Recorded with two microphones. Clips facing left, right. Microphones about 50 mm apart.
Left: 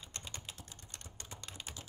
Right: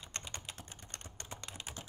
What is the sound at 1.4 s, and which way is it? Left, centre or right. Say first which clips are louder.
Typing: left 1 dB; centre.